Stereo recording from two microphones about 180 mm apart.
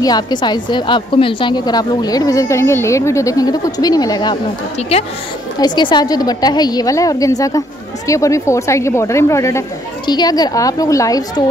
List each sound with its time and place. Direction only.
0.0 s a woman's voice: 25° left (ahead or behind)
4.7 s a woman's voice: 35° left (ahead or behind)